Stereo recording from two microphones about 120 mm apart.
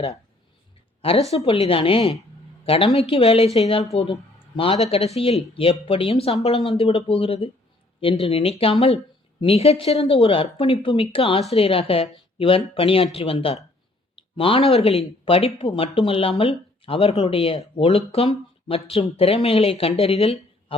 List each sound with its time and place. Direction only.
1.0 s speech: 55° left (ahead or behind)